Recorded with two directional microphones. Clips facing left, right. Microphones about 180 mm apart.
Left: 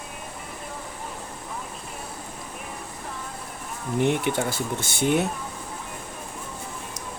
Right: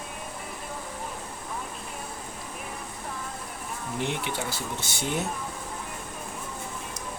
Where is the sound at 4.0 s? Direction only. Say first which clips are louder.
Left 8 dB; 50° left (ahead or behind).